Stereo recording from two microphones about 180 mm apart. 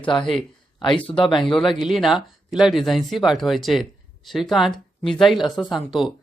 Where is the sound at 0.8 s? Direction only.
30° left (ahead or behind).